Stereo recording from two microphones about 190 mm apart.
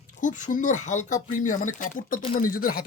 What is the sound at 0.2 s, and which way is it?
Speech, 40° left (ahead or behind).